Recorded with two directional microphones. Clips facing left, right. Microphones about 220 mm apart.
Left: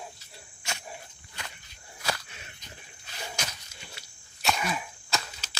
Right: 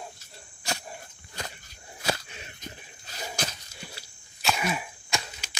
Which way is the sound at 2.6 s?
40° right (ahead or behind).